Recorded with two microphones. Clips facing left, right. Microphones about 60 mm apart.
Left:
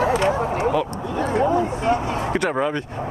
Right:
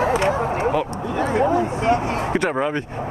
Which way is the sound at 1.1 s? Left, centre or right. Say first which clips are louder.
Right 1 dB; right.